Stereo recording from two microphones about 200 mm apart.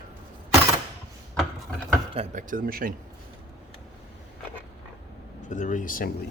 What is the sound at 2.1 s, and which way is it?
Speech, 35° right (ahead or behind).